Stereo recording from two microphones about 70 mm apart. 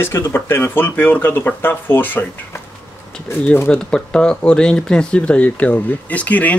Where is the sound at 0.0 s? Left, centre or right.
Left.